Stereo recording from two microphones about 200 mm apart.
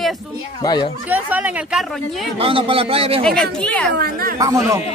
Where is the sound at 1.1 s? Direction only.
10° right (ahead or behind).